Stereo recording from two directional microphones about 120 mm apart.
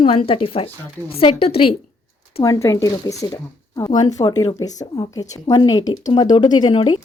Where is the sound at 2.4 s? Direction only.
25° left (ahead or behind); by 7.0 s 40° left (ahead or behind).